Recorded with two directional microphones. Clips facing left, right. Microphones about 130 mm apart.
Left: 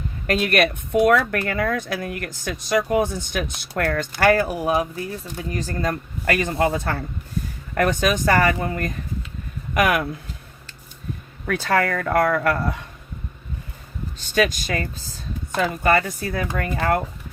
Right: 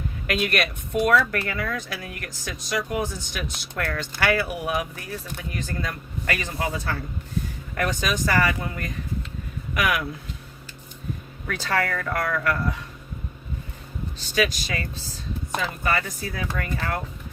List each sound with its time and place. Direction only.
0.3 s speech: 45° left (ahead or behind); by 5.5 s 25° left (ahead or behind)
5.5 s speech: 40° left (ahead or behind)
11.4 s speech: 50° left (ahead or behind)
14.2 s speech: 50° left (ahead or behind)